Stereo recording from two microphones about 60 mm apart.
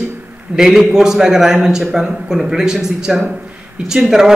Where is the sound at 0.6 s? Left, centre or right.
Centre.